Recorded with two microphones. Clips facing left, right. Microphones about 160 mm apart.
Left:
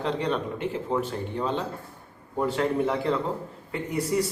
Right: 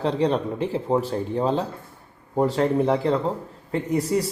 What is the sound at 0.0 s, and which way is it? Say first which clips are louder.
A man's voice: right 5 dB; 35° right (ahead or behind).